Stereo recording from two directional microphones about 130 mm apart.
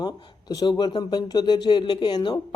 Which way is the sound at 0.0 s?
30° left (ahead or behind).